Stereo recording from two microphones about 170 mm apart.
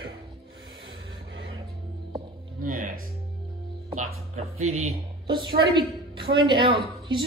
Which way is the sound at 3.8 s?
35° right (ahead or behind).